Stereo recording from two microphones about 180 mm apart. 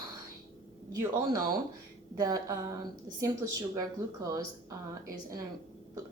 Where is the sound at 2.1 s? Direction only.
20° right (ahead or behind).